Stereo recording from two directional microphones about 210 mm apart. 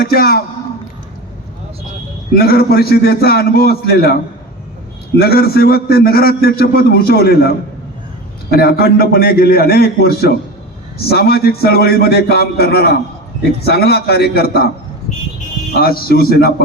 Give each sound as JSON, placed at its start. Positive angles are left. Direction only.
{"t": 0.0, "sound": "a man's voice", "side_deg": 45}
{"t": 2.3, "sound": "a man's voice", "side_deg": 50}
{"t": 15.7, "sound": "a man's voice", "side_deg": 45}